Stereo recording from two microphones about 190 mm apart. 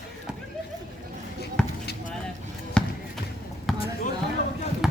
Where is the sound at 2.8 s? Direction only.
5° left (ahead or behind).